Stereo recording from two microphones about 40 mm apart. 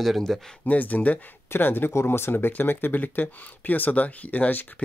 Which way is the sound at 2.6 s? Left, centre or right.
Left.